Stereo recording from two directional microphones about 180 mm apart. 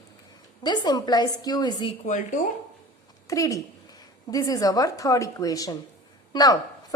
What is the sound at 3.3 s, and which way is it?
A woman's voice, 20° left (ahead or behind).